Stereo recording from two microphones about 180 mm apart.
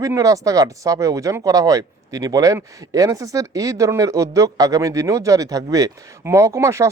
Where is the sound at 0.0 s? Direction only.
20° right (ahead or behind).